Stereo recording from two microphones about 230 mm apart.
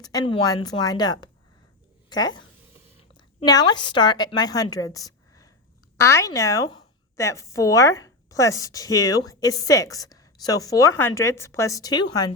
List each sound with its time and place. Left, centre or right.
0.0 s a woman's voice: centre